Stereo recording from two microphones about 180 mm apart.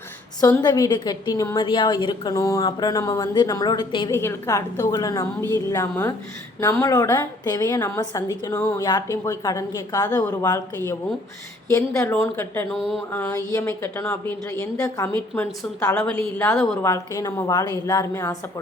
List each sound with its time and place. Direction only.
0.4 s a woman's voice: 20° left (ahead or behind)
4.1 s a woman's voice: 15° left (ahead or behind)
16.8 s a woman's voice: 15° left (ahead or behind)